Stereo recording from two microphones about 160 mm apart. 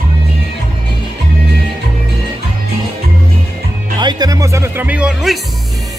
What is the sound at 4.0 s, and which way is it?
Speech, 25° right (ahead or behind).